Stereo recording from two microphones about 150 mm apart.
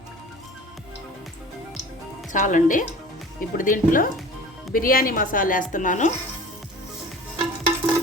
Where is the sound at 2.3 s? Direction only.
55° left (ahead or behind).